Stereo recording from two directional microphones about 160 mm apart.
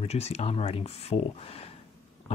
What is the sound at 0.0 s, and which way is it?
Speech, 40° left (ahead or behind).